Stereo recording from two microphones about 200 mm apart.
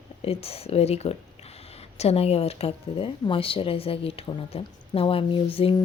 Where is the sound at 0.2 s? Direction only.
30° left (ahead or behind).